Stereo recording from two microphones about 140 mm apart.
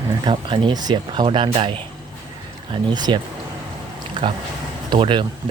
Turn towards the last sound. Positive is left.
turn(degrees=-35)  # may be behind; listen again after turning